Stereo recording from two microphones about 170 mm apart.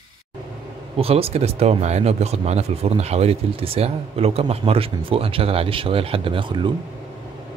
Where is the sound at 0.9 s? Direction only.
35° right (ahead or behind).